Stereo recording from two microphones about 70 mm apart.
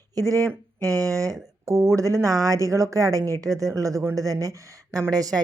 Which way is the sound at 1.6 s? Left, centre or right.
Right.